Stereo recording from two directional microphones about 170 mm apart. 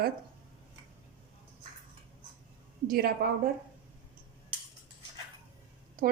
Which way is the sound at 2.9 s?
60° right (ahead or behind).